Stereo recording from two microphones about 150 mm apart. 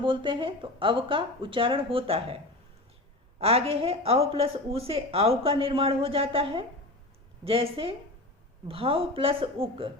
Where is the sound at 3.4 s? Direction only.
40° right (ahead or behind).